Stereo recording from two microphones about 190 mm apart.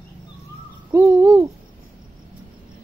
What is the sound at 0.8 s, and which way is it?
Owl, 15° right (ahead or behind).